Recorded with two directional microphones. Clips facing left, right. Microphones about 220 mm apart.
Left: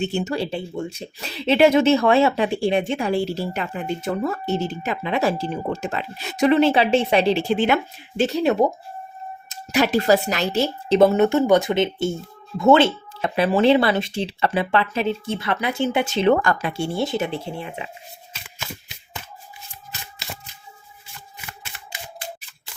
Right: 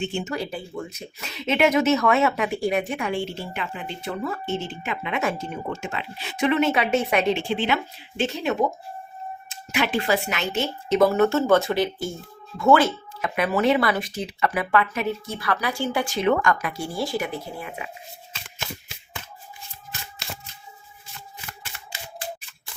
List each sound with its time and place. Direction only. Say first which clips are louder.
0.0 s speech: left 4 dB; 40° left (ahead or behind)